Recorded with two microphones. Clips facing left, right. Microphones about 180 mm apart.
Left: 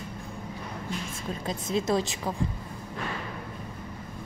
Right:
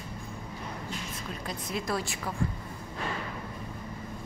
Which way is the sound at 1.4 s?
25° left (ahead or behind).